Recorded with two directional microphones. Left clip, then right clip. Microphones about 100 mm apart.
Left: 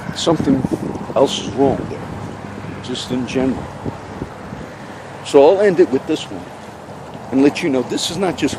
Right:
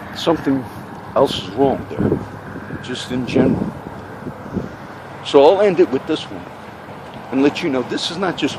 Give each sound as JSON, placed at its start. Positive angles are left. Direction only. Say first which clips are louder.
{"t": 0.2, "sound": "speech", "louder": "left 1 dB", "side_deg": 35}
{"t": 2.8, "sound": "speech", "louder": "left 2 dB", "side_deg": 30}
{"t": 5.2, "sound": "speech", "louder": "left 1 dB", "side_deg": 30}
{"t": 7.3, "sound": "speech", "louder": "left 2 dB", "side_deg": 45}